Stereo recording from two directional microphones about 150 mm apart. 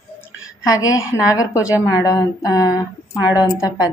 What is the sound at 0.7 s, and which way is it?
A woman's voice, 20° left (ahead or behind).